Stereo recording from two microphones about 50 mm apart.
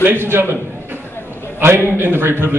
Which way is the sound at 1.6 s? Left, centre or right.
Right.